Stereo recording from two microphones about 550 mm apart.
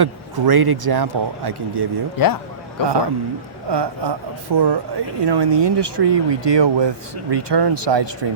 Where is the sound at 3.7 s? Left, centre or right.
Right.